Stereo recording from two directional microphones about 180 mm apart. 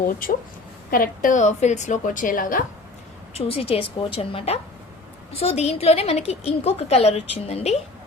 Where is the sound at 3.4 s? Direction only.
30° left (ahead or behind).